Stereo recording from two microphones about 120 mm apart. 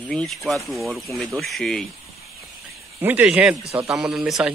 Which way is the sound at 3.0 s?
15° right (ahead or behind).